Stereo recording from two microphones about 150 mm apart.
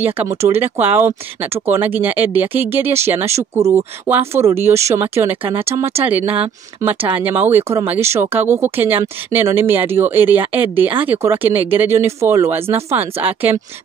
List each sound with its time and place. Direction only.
0.0 s speech: 15° right (ahead or behind)